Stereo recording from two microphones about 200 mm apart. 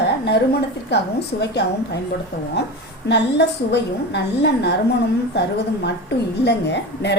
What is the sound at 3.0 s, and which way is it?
A woman's voice, 60° left (ahead or behind).